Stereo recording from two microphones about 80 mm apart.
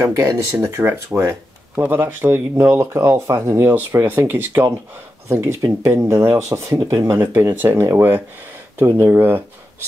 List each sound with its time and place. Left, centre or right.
0.0 s speech: right
7.2 s speech: right